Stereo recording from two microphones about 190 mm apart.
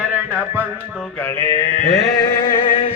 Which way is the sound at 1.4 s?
15° left (ahead or behind).